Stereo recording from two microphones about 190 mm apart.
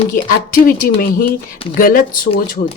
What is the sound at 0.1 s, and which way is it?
A woman's voice, 45° left (ahead or behind).